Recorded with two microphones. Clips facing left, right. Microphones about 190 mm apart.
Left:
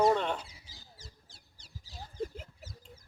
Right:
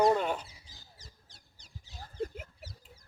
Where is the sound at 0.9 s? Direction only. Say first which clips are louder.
Left 3 dB; 30° left (ahead or behind).